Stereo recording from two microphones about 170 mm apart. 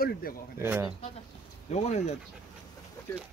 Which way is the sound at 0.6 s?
15° right (ahead or behind).